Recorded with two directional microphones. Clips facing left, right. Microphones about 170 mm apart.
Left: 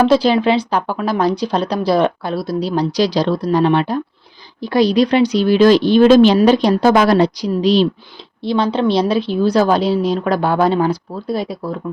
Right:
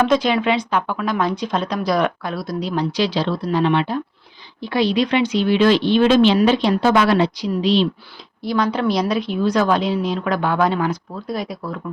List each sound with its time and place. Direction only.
0.0 s speech: 35° left (ahead or behind)
8.4 s speech: 25° left (ahead or behind)